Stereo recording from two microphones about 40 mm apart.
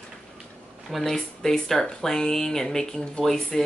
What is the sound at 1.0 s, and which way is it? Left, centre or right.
Speech, centre.